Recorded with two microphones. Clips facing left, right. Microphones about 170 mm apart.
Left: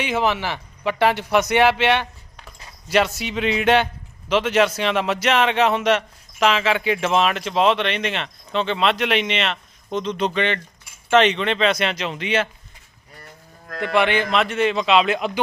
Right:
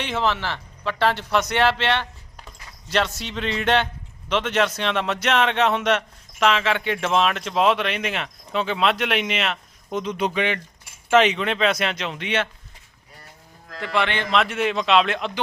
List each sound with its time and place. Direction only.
0.0 s a man's voice: 10° left (ahead or behind)
13.7 s cattle: 55° left (ahead or behind)
13.9 s a man's voice: 10° left (ahead or behind)